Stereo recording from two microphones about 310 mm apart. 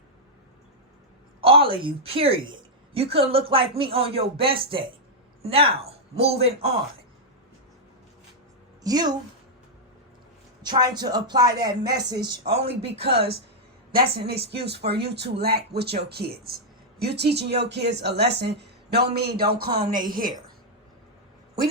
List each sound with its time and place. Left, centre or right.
1.4 s a woman's voice: centre
8.8 s a man's voice: centre
10.6 s a man's voice: centre
14.1 s speech: right